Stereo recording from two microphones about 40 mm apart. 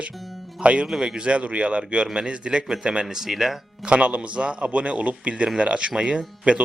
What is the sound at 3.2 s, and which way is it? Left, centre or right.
Speech, centre.